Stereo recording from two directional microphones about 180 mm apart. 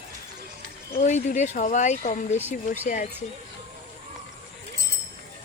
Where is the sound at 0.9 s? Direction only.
40° left (ahead or behind).